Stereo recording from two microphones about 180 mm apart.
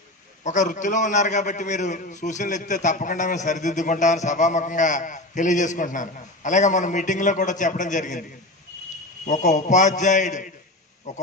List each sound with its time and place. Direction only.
0.4 s a man's voice: 45° left (ahead or behind)
9.2 s a man's voice: 40° left (ahead or behind)